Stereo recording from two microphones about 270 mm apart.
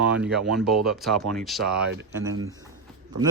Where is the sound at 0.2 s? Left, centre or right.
Centre.